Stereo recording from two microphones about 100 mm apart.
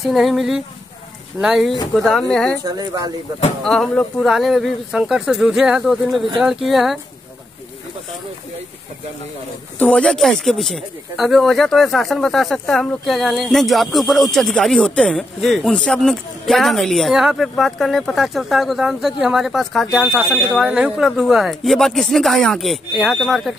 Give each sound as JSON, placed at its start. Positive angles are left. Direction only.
{"t": 0.0, "sound": "speech", "side_deg": 0}
{"t": 2.6, "sound": "speech", "side_deg": -40}
{"t": 3.6, "sound": "speech", "side_deg": 5}
{"t": 9.8, "sound": "speech", "side_deg": 10}